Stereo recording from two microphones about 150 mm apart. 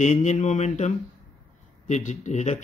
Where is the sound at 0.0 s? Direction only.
55° left (ahead or behind).